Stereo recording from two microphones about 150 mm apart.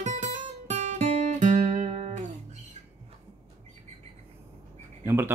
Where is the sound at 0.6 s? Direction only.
50° right (ahead or behind).